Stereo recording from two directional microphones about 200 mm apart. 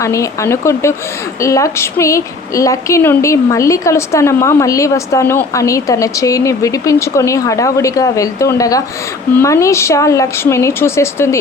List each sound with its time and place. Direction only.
0.0 s a woman's voice: 15° left (ahead or behind)